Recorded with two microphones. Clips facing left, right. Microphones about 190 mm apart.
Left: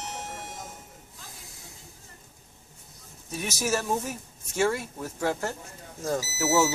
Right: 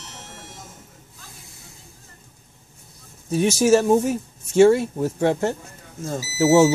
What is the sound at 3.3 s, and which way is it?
Speech, 30° right (ahead or behind).